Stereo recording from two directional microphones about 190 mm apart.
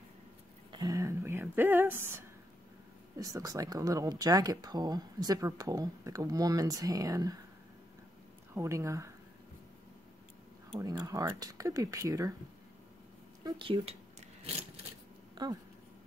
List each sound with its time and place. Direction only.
0.7 s a sound: 20° right (ahead or behind)
3.2 s speech: 20° right (ahead or behind)
8.5 s speech: 15° right (ahead or behind)
10.7 s speech: 20° right (ahead or behind)
13.4 s speech: 25° right (ahead or behind)
15.4 s speech: 25° right (ahead or behind)